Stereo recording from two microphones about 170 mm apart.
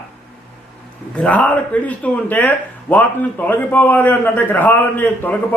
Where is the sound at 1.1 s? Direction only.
5° left (ahead or behind).